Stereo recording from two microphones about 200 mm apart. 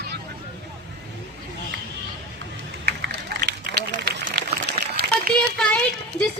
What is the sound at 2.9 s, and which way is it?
Run, 55° right (ahead or behind).